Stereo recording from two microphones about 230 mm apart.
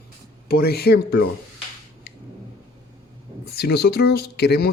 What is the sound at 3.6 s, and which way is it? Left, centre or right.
Speech, left.